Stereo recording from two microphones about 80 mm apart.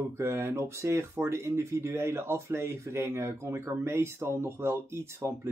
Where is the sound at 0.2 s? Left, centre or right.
Right.